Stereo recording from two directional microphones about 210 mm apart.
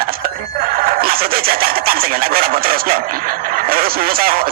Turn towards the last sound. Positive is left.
turn(degrees=-45)  # may be behind; listen again after turning